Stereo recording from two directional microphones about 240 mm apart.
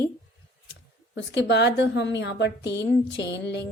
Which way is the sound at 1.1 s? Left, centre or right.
Left.